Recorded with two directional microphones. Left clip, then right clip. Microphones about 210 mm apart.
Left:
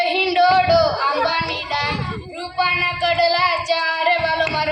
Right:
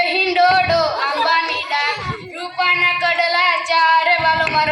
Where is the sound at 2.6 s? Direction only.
50° left (ahead or behind).